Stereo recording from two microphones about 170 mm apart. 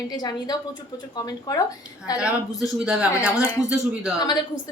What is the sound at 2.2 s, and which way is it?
Speech, 5° right (ahead or behind).